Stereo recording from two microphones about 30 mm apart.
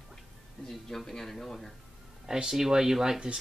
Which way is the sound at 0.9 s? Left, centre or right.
Centre.